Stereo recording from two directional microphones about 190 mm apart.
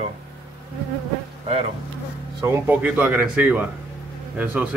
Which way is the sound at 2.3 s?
15° right (ahead or behind).